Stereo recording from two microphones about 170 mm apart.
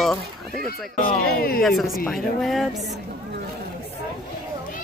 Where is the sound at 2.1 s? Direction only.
Centre (ahead or behind).